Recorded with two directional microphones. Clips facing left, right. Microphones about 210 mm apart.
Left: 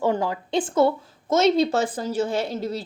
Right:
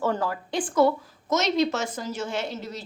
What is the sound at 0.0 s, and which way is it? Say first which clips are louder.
A woman's voice: left 3 dB; 15° left (ahead or behind).